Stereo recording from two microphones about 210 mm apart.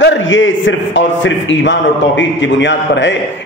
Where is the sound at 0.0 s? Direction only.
60° left (ahead or behind).